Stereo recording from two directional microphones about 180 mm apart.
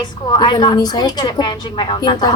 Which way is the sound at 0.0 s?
25° left (ahead or behind).